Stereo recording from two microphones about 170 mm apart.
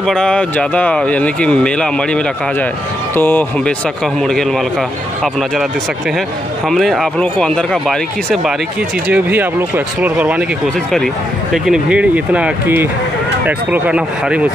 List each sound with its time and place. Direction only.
0.0 s speech: 5° left (ahead or behind)
6.7 s speech: centre (ahead or behind)
9.1 s speech: 10° right (ahead or behind)
11.5 s speech: 5° right (ahead or behind)